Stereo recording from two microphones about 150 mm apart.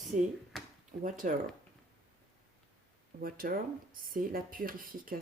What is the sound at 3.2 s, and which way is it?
Speech, 75° right (ahead or behind).